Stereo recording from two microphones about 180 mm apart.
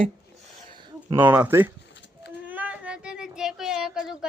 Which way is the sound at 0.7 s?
25° right (ahead or behind).